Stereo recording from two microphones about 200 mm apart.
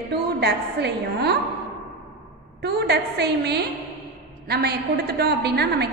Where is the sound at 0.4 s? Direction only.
55° right (ahead or behind).